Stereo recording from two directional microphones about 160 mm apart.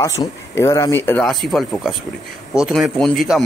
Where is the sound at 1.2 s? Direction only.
Centre (ahead or behind).